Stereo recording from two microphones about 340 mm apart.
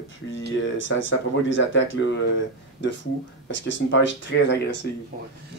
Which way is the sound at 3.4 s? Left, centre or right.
Left.